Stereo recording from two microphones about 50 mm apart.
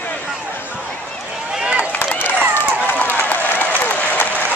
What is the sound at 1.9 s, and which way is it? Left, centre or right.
Run, left.